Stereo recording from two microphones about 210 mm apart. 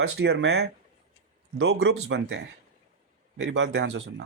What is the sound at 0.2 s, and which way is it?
Speech, 50° right (ahead or behind).